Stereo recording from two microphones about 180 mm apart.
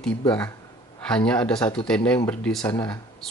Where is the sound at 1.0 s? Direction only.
5° left (ahead or behind).